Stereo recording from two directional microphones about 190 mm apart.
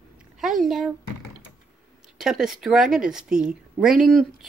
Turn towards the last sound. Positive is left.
turn(degrees=0)  # may be behind; listen again after turning